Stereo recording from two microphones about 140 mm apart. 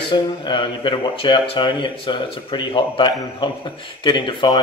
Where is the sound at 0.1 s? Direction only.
35° left (ahead or behind).